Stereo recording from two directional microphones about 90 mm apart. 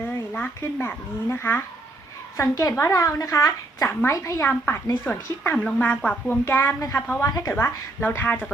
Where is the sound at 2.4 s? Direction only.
40° left (ahead or behind); by 6.4 s 15° left (ahead or behind).